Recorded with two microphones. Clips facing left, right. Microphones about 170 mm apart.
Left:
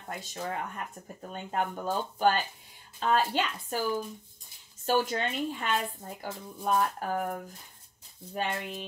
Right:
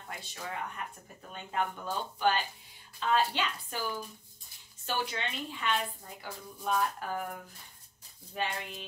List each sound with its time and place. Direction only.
0.1 s speech: 45° left (ahead or behind)
4.8 s speech: 40° left (ahead or behind)
8.4 s speech: 45° left (ahead or behind)